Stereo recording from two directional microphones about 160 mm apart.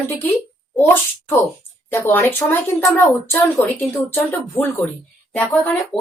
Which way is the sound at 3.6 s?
10° left (ahead or behind).